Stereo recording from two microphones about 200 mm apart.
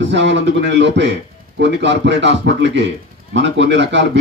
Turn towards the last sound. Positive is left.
turn(degrees=-60)  # may be behind; listen again after turning